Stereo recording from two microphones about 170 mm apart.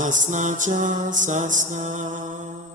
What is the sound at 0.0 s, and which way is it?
Music, 45° right (ahead or behind).